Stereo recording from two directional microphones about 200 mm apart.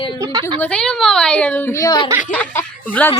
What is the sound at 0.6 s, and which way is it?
A woman's voice, 5° left (ahead or behind).